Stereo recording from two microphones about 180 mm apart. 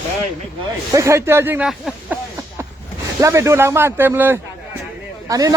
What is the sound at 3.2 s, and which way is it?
A man's voice, 15° right (ahead or behind).